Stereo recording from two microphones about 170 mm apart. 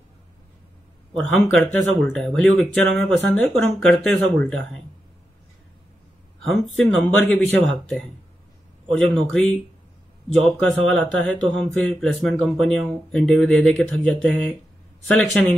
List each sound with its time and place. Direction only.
1.1 s speech: centre (ahead or behind)
6.4 s speech: centre (ahead or behind)
9.3 s speech: 5° left (ahead or behind)
10.6 s speech: 5° left (ahead or behind)